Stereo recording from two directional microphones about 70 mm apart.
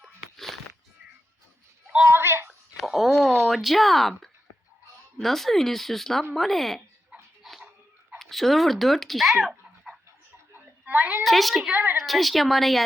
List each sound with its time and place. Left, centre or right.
0.0 s music: centre
2.0 s a sound: right
2.7 s a sound: centre
5.1 s speech: centre
7.4 s dog: centre
8.2 s speech: centre
10.5 s a sound: right
11.2 s speech: centre
11.7 s a woman's voice: right
12.0 s speech: centre